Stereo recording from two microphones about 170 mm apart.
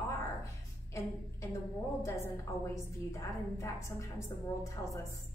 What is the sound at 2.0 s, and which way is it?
A woman's voice, 15° left (ahead or behind).